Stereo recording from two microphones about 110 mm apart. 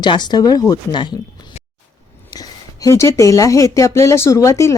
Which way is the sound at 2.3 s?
35° left (ahead or behind).